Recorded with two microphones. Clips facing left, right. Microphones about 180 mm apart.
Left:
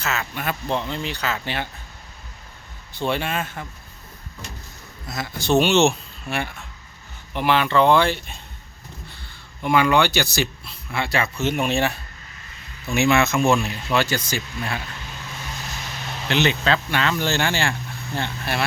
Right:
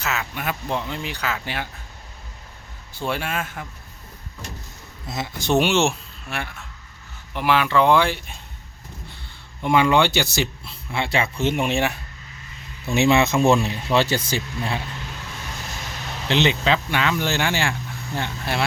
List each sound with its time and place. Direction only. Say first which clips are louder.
0.0 s speech: even; 15° right (ahead or behind)
3.1 s speech: left 1 dB; 5° right (ahead or behind)
5.0 s speech: left 1 dB; 25° right (ahead or behind)
9.6 s speech: right 1 dB; 25° right (ahead or behind)
12.9 s speech: right 1 dB; 30° right (ahead or behind)
13.6 s speech: right 2 dB; 20° right (ahead or behind)
14.0 s speech: right 2 dB; 30° right (ahead or behind)
16.3 s speech: right 1 dB; 20° right (ahead or behind)